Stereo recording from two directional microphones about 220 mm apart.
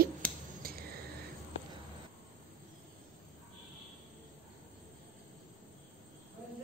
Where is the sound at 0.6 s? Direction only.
45° right (ahead or behind).